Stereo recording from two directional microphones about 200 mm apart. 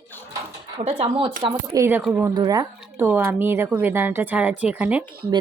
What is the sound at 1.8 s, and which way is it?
Speech, 5° right (ahead or behind).